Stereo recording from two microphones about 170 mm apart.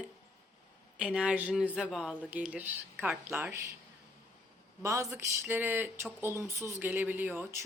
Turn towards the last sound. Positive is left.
turn(degrees=-10)  # may be behind; listen again after turning